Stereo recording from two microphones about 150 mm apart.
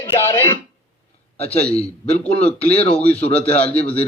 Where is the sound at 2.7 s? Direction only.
40° left (ahead or behind).